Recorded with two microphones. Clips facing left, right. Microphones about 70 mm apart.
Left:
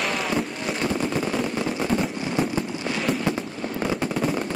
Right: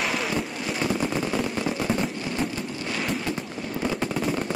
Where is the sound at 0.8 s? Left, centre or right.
Centre.